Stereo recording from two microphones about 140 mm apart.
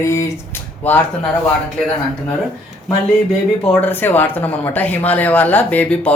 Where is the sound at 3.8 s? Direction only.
15° left (ahead or behind).